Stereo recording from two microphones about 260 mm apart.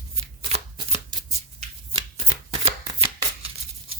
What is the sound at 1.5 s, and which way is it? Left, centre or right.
Shuffling cards, centre.